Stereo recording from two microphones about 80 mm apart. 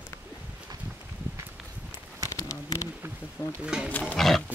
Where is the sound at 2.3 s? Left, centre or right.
Left.